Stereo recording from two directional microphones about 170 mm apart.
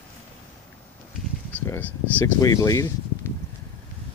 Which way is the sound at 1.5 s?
10° left (ahead or behind).